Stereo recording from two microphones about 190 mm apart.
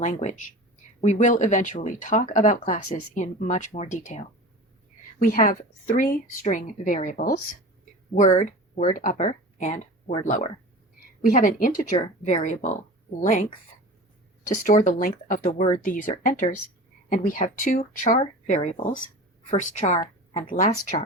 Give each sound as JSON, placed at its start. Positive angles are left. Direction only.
{"t": 0.0, "sound": "speech", "side_deg": 40}
{"t": 5.3, "sound": "a woman's voice", "side_deg": 45}
{"t": 8.1, "sound": "a woman's voice", "side_deg": 40}
{"t": 14.5, "sound": "a woman's voice", "side_deg": 40}